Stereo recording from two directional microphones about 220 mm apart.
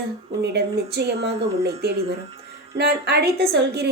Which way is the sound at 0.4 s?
50° right (ahead or behind).